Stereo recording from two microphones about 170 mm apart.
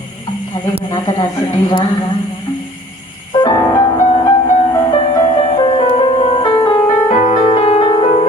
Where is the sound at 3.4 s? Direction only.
25° left (ahead or behind).